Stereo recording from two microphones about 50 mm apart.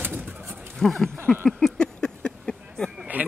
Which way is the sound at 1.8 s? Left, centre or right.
Centre.